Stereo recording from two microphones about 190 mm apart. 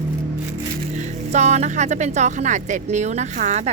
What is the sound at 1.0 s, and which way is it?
Speech, 35° right (ahead or behind).